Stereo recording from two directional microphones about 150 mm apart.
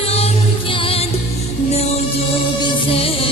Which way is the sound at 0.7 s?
35° left (ahead or behind).